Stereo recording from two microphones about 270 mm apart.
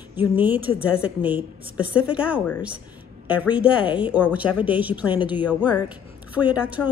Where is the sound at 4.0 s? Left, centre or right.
Centre.